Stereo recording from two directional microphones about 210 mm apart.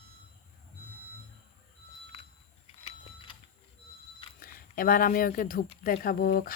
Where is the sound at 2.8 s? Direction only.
25° left (ahead or behind).